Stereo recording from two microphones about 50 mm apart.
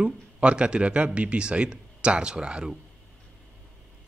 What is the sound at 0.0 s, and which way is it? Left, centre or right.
Speech, right.